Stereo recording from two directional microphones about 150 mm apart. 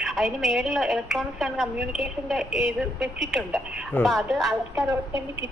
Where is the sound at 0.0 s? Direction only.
Centre (ahead or behind).